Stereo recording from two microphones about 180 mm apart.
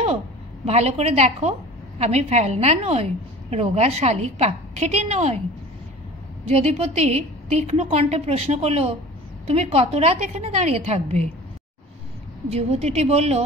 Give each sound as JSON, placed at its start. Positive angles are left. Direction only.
{"t": 0.7, "sound": "a woman's voice", "side_deg": -35}
{"t": 6.4, "sound": "a woman's voice", "side_deg": -35}
{"t": 12.4, "sound": "a woman's voice", "side_deg": -35}